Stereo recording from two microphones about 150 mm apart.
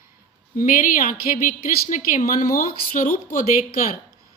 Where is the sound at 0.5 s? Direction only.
70° left (ahead or behind).